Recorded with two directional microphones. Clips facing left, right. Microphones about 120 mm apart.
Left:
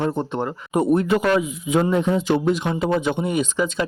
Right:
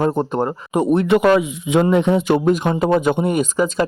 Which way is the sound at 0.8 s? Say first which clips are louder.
Right 3 dB; 85° right.